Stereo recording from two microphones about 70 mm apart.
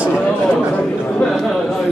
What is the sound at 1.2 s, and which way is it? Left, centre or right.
Speech, centre.